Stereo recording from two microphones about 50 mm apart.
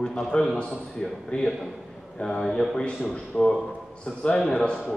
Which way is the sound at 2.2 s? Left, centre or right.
Centre.